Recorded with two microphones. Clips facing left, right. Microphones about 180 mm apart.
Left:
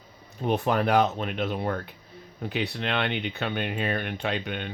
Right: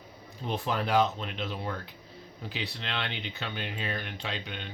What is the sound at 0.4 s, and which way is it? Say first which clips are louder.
Speech: left 7 dB; 60° left (ahead or behind).